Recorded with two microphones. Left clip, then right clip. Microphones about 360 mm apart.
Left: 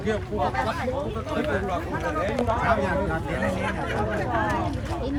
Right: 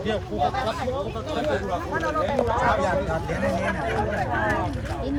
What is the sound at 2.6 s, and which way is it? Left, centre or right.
Speech, right.